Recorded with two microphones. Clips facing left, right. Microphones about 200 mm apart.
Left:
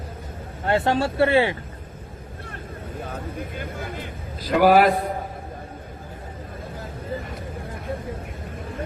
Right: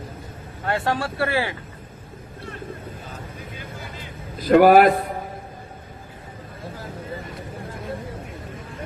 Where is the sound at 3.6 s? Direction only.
55° left (ahead or behind).